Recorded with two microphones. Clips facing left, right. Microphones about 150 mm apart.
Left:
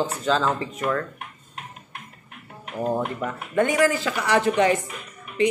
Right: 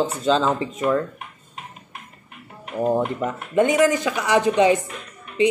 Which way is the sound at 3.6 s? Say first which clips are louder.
Right 3 dB; 20° right (ahead or behind).